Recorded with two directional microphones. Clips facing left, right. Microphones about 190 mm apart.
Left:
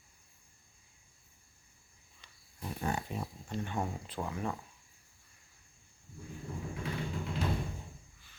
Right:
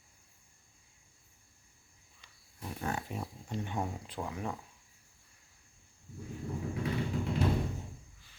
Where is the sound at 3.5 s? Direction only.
15° right (ahead or behind).